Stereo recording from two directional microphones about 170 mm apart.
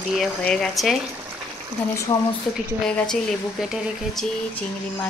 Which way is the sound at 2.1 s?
25° left (ahead or behind).